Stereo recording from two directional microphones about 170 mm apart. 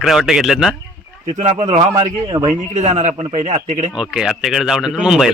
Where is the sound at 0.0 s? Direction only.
Centre (ahead or behind).